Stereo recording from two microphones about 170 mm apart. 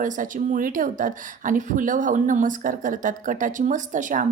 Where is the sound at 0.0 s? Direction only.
50° right (ahead or behind).